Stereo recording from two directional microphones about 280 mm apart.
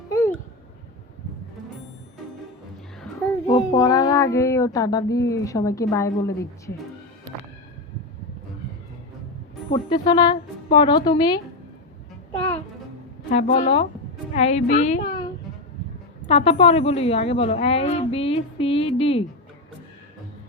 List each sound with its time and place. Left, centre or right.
0.1 s a sound: centre
3.5 s speech: centre
9.7 s a woman's voice: centre
13.3 s a woman's voice: left